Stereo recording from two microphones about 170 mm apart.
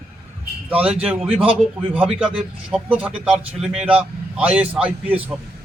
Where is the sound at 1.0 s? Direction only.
5° right (ahead or behind).